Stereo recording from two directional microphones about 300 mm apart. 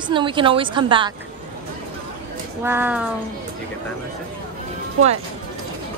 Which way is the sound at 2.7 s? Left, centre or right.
Centre.